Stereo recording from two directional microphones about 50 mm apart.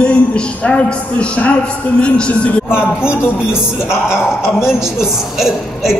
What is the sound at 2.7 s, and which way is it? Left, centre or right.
Speech, centre.